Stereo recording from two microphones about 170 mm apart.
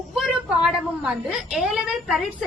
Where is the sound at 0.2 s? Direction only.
5° right (ahead or behind).